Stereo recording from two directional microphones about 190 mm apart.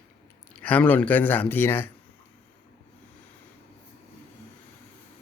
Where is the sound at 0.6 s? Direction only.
10° left (ahead or behind).